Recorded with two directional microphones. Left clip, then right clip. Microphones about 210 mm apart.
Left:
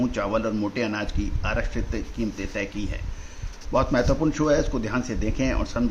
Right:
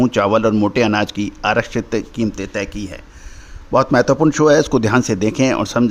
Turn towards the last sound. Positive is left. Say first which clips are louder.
# right 10 dB
turn(degrees=-50)  # may be behind; listen again after turning